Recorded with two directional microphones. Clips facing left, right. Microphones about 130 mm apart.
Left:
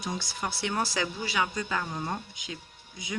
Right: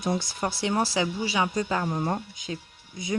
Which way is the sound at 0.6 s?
25° right (ahead or behind).